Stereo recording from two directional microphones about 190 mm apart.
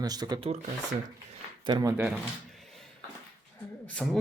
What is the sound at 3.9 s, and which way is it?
Speech, centre (ahead or behind).